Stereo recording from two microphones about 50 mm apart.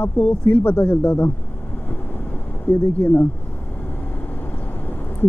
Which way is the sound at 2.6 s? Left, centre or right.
Left.